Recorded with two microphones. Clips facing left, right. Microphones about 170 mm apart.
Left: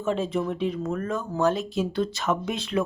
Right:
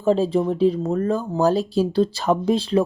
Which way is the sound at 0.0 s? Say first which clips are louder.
Right 7 dB; 35° right (ahead or behind).